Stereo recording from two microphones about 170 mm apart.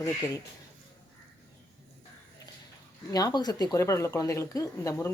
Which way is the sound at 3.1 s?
20° left (ahead or behind).